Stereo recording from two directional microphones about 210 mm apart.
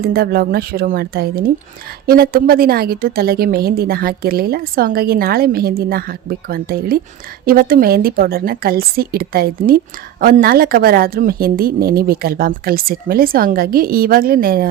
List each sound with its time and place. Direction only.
0.0 s a woman's voice: 45° right (ahead or behind)